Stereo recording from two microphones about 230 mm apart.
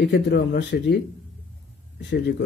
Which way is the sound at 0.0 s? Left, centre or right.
Left.